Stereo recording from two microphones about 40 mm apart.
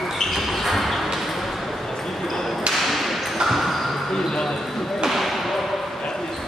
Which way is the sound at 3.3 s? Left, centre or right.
Centre.